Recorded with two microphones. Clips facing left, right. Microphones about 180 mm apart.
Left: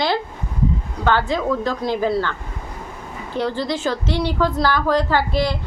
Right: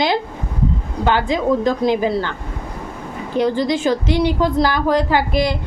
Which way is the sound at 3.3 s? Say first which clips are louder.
Right 5 dB; 15° right (ahead or behind).